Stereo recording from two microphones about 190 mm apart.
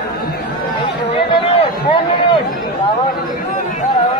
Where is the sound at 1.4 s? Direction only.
30° left (ahead or behind).